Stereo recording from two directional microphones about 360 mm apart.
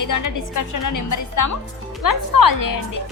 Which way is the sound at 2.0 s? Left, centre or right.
Left.